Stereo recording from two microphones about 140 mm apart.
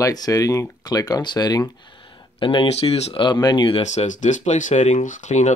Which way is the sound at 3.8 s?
60° left (ahead or behind).